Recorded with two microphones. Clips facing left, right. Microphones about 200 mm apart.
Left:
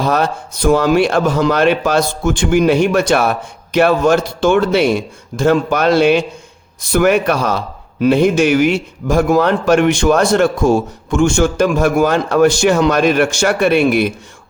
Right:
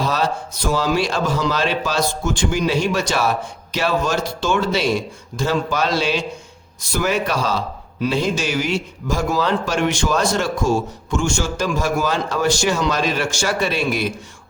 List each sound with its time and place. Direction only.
0.7 s a man's voice: 55° left (ahead or behind)